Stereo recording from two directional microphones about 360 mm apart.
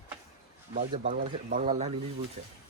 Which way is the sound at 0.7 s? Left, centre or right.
Right.